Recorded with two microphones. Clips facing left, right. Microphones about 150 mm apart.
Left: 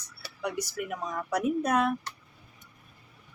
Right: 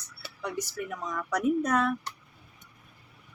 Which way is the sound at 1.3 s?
10° left (ahead or behind).